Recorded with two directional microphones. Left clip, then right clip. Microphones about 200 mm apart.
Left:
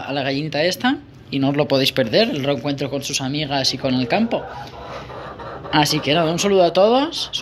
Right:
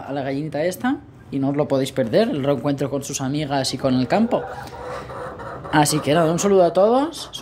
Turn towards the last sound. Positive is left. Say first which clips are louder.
# left 2 dB
turn(degrees=-15)  # may be behind; listen again after turning